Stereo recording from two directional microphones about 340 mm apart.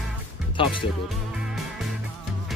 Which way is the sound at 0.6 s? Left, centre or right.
Centre.